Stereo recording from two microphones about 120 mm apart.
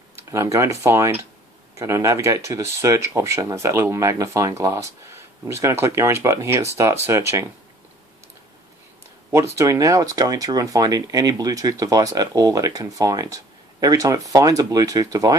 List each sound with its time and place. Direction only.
0.2 s speech: 25° right (ahead or behind)
9.3 s speech: 25° right (ahead or behind)